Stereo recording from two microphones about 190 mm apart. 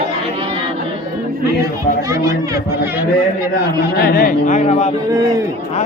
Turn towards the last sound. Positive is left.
turn(degrees=-20)  # may be behind; listen again after turning